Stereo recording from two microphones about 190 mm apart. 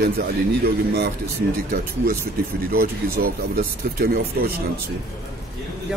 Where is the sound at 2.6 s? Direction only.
50° right (ahead or behind).